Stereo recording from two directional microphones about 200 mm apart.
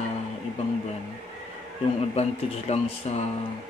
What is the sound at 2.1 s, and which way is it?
Speech, 30° left (ahead or behind).